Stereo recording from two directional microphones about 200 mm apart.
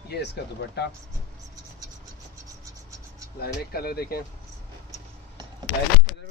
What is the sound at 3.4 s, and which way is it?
Speech, 50° left (ahead or behind).